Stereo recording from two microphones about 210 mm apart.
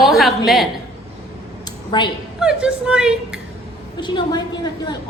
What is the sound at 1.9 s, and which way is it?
Speech, 20° left (ahead or behind).